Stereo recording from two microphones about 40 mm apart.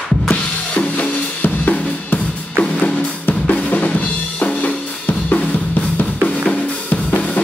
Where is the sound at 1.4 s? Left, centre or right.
Left.